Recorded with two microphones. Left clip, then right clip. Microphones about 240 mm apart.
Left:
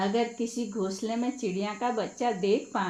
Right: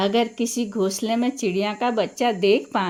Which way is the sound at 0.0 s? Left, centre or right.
Right.